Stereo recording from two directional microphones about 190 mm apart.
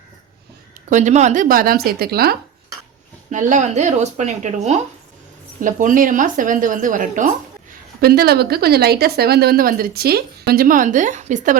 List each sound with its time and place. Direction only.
0.9 s speech: 40° right (ahead or behind)
3.2 s speech: 40° right (ahead or behind)
8.0 s speech: 55° right (ahead or behind)